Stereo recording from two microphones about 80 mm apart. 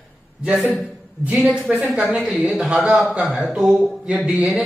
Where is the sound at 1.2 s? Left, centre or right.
Centre.